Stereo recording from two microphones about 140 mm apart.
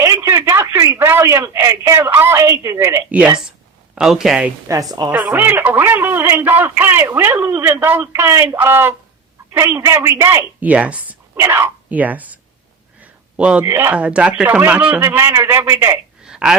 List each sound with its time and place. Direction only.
0.0 s speech: 20° right (ahead or behind); by 4.5 s 5° right (ahead or behind)
4.7 s a woman's voice: 25° right (ahead or behind)
5.1 s a man's voice: 10° right (ahead or behind)
13.9 s a man's voice: 10° right (ahead or behind)
16.2 s a sound: 5° right (ahead or behind)